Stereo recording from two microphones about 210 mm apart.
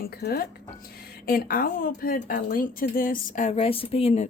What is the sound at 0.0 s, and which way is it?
A woman's voice, 45° left (ahead or behind).